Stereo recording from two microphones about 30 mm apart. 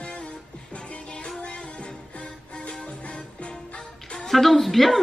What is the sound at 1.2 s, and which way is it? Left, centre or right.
Music, left.